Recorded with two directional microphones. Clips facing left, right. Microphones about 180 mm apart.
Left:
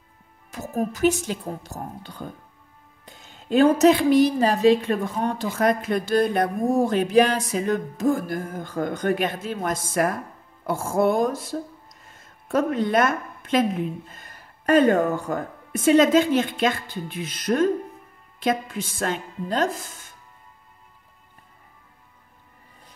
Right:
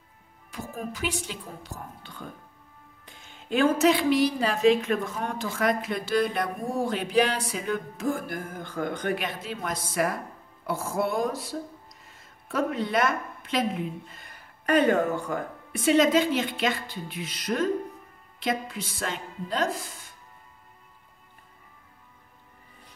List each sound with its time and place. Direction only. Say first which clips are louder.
0.5 s speech: left 8 dB; 45° left (ahead or behind)
12.1 s a sound: left 9 dB; 45° left (ahead or behind)
14.1 s speech: left 2 dB; 45° left (ahead or behind)